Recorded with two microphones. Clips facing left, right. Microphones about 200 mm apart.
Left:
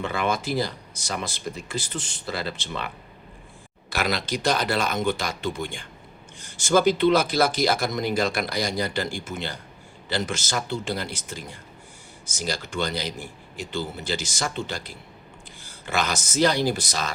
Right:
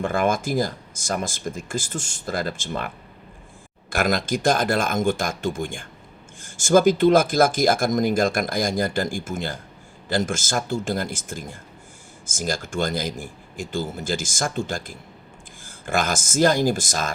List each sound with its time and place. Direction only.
0.0 s speech: 50° right (ahead or behind)